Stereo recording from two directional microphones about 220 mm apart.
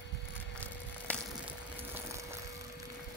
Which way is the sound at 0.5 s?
5° left (ahead or behind).